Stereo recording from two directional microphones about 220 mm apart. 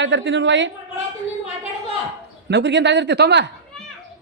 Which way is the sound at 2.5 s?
50° right (ahead or behind).